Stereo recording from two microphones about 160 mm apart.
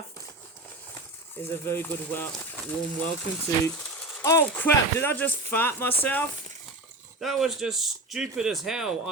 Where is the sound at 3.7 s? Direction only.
5° left (ahead or behind).